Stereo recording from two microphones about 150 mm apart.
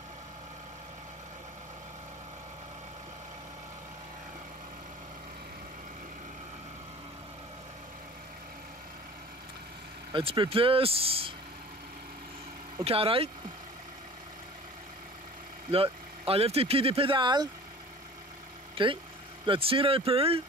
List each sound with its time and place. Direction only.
10.1 s speech: 35° right (ahead or behind)
12.8 s speech: 40° right (ahead or behind)
15.7 s speech: 40° right (ahead or behind)
18.8 s speech: 35° right (ahead or behind)